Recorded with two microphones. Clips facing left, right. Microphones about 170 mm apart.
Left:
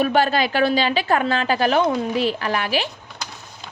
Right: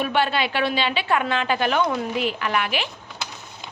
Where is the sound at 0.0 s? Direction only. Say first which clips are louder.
Left 4 dB; 40° left (ahead or behind).